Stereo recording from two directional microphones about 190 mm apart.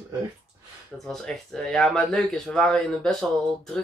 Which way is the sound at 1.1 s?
Centre (ahead or behind).